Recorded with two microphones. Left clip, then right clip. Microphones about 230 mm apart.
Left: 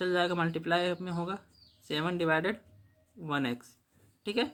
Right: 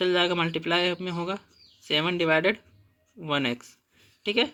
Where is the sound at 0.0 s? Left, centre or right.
Centre.